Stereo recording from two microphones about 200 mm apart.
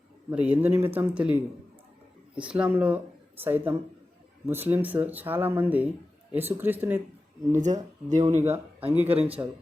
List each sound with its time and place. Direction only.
0.3 s speech: 5° right (ahead or behind)
7.5 s speech: 35° right (ahead or behind)